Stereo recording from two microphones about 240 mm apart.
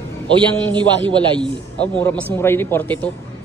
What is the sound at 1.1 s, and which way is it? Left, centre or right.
Speech, centre.